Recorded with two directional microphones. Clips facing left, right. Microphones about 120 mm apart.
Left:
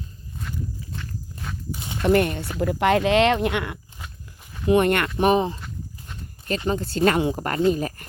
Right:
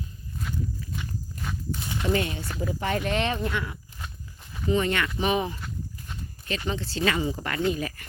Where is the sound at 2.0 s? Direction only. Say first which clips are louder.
Left 8 dB; 55° left (ahead or behind).